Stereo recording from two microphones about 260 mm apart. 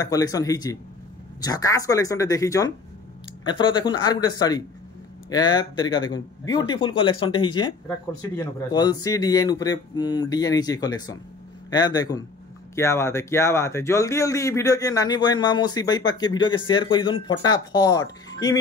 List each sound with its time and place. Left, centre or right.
0.0 s speech: centre